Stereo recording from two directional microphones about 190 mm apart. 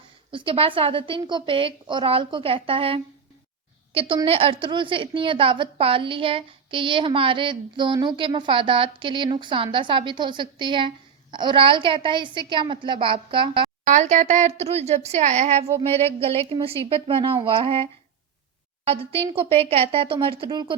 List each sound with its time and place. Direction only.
0.3 s a woman's voice: 25° right (ahead or behind)
13.8 s a woman's voice: 40° right (ahead or behind)
18.9 s a woman's voice: 30° right (ahead or behind)